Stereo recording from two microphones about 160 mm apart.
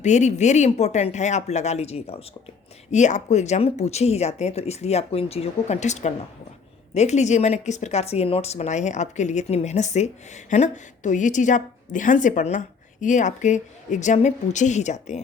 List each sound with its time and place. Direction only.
0.0 s speech: 50° left (ahead or behind)